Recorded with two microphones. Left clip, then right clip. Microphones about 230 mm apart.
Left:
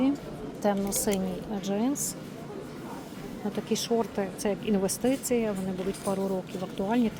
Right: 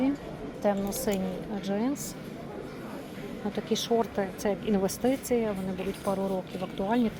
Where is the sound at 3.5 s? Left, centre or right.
Centre.